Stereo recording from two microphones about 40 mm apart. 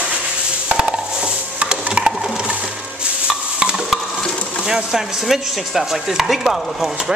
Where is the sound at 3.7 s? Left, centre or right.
Centre.